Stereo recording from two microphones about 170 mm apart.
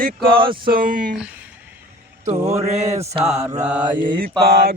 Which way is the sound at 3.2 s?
30° right (ahead or behind).